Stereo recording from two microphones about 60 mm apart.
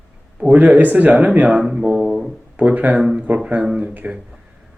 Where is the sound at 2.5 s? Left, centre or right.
Right.